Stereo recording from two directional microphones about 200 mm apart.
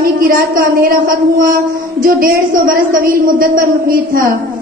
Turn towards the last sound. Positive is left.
turn(degrees=-45)  # may be behind; listen again after turning